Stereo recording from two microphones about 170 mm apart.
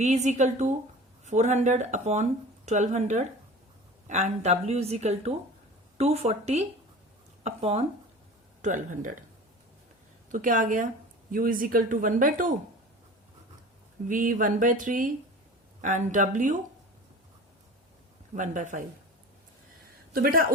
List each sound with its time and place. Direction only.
0.0 s a woman's voice: 45° right (ahead or behind)
8.6 s speech: 50° right (ahead or behind)
10.3 s speech: 50° right (ahead or behind)
14.1 s speech: 50° right (ahead or behind)
18.3 s speech: 50° right (ahead or behind)